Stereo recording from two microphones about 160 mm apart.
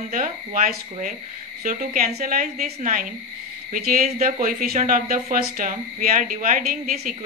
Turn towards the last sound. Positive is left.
turn(degrees=-65)  # may be behind; listen again after turning